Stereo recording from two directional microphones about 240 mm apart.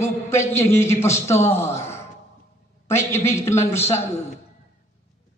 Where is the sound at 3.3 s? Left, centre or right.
Left.